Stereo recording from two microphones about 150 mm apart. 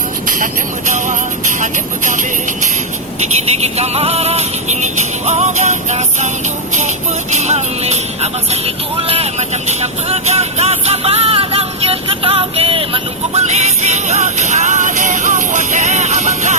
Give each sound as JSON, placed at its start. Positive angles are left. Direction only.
{"t": 0.9, "sound": "music", "side_deg": -55}
{"t": 3.8, "sound": "music", "side_deg": -45}